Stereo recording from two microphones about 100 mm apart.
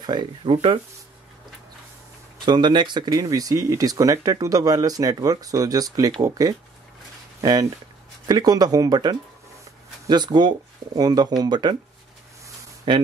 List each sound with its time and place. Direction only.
0.0 s speech: 45° right (ahead or behind)
2.4 s speech: 50° right (ahead or behind)
8.3 s speech: 40° right (ahead or behind)
12.9 s speech: 55° right (ahead or behind)